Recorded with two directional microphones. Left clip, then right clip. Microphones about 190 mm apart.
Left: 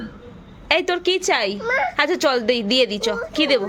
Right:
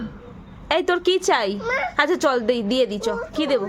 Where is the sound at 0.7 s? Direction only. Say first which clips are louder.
Left 1 dB; 20° right (ahead or behind).